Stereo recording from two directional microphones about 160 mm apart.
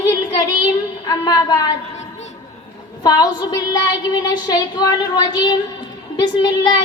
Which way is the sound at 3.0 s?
25° left (ahead or behind).